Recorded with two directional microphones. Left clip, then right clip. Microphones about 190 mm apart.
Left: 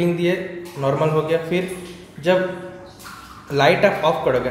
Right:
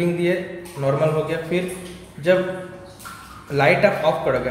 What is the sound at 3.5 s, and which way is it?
Speech, 15° left (ahead or behind).